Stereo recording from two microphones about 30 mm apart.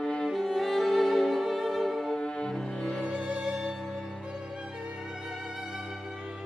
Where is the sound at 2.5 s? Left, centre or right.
Left.